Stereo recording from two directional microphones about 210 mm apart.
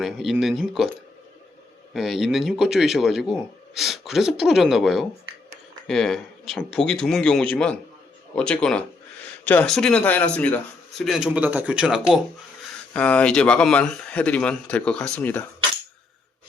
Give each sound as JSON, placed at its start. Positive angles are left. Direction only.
{"t": 0.0, "sound": "speech", "side_deg": 0}
{"t": 1.9, "sound": "speech", "side_deg": 0}